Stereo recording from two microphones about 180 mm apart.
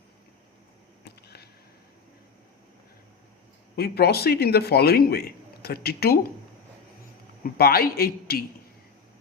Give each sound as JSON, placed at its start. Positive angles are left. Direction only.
{"t": 1.0, "sound": "a sound", "side_deg": 60}
{"t": 3.8, "sound": "a man's voice", "side_deg": 60}
{"t": 7.6, "sound": "a man's voice", "side_deg": 60}